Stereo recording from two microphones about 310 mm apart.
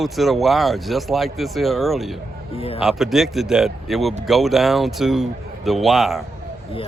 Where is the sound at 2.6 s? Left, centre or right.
Centre.